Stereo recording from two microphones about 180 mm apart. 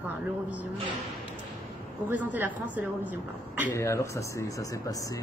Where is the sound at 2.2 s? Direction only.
10° right (ahead or behind).